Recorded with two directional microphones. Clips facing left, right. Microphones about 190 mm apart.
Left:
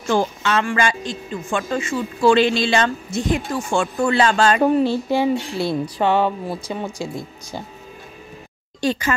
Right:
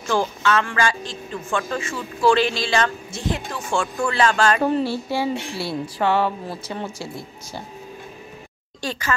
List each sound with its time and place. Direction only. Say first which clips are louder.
0.1 s a woman's voice: left 1 dB; 20° left (ahead or behind)